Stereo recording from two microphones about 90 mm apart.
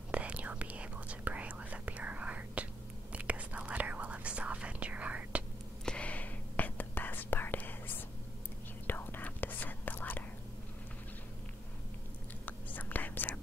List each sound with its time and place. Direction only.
0.1 s whispering: 15° right (ahead or behind)
5.9 s whispering: 15° left (ahead or behind)
12.4 s whispering: 20° left (ahead or behind)